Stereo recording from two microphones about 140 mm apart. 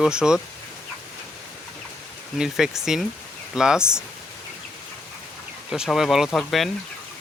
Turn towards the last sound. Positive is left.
turn(degrees=0)  # may be behind; listen again after turning